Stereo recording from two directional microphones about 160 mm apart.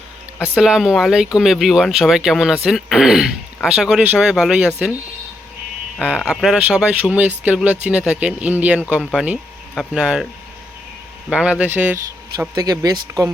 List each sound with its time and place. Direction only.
0.5 s speech: 5° right (ahead or behind)
6.0 s speech: 5° right (ahead or behind)
11.3 s speech: 5° right (ahead or behind)
12.5 s speech: 25° right (ahead or behind)